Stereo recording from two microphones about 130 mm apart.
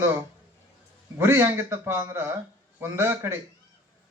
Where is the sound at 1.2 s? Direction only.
20° right (ahead or behind).